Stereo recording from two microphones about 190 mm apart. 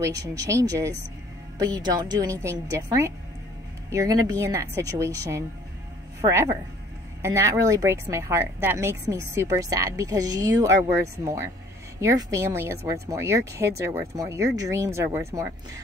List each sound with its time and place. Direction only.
0.0 s a woman's voice: 15° right (ahead or behind)